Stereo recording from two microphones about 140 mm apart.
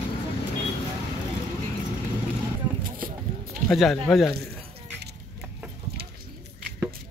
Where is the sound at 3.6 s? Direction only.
Centre (ahead or behind).